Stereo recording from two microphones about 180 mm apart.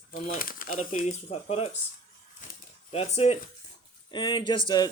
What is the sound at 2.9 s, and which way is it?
Speech, 35° left (ahead or behind).